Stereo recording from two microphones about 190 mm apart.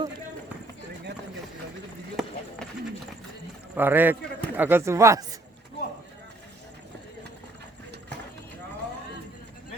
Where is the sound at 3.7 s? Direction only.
10° right (ahead or behind).